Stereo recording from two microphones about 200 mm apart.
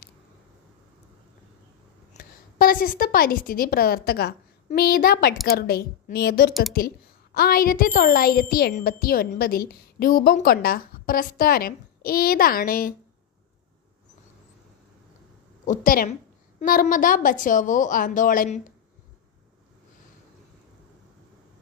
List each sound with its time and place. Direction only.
2.1 s a woman's voice: 45° left (ahead or behind)
15.6 s a woman's voice: 40° left (ahead or behind)